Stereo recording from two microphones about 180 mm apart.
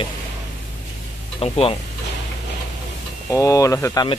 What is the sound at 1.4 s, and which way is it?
Speech, 30° left (ahead or behind).